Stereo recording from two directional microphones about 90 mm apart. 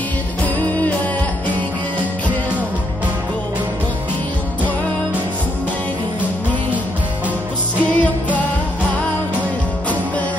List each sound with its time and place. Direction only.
0.4 s music: 15° left (ahead or behind)
7.8 s music: 15° left (ahead or behind)